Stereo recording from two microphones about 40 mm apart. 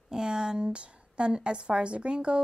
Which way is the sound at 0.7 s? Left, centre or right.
Right.